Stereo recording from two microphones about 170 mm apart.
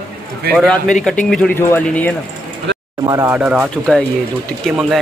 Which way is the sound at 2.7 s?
90° right.